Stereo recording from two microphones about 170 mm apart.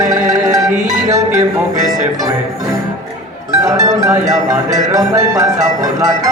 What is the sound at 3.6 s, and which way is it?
Music, 20° right (ahead or behind).